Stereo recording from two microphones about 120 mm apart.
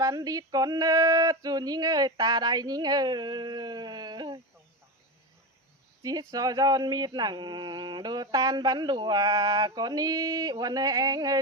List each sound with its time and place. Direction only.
0.0 s speech: 30° right (ahead or behind)
6.0 s speech: 30° right (ahead or behind)